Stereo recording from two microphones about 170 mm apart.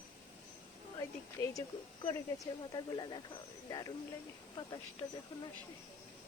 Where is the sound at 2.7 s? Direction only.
25° left (ahead or behind).